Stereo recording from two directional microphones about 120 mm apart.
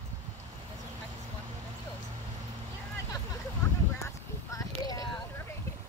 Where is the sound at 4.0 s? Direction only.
25° left (ahead or behind).